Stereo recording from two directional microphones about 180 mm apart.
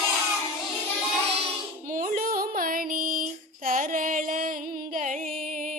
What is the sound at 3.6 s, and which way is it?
Music, 50° right (ahead or behind).